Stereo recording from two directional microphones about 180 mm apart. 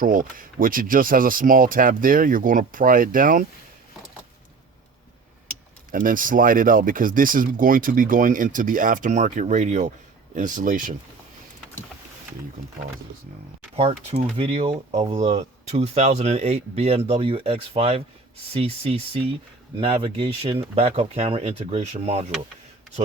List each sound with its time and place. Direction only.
0.0 s speech: 50° right (ahead or behind)
5.9 s speech: 50° right (ahead or behind)
13.7 s speech: 35° right (ahead or behind)